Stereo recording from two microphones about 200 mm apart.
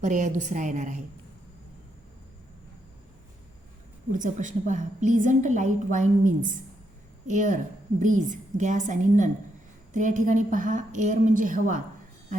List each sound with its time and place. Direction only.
0.0 s a woman's voice: 40° right (ahead or behind)
4.1 s a woman's voice: 40° right (ahead or behind)